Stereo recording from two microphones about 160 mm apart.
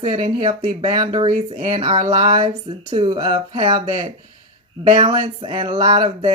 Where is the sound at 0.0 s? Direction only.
35° right (ahead or behind).